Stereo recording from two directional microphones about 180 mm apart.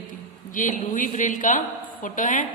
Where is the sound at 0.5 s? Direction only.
45° left (ahead or behind).